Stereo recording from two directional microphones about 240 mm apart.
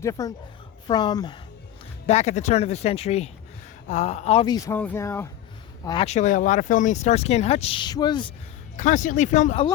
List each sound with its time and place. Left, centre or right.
0.0 s speech: centre
2.0 s speech: left
8.7 s speech: left